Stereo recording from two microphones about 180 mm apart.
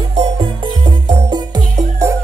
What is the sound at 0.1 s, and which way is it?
Music, 30° right (ahead or behind).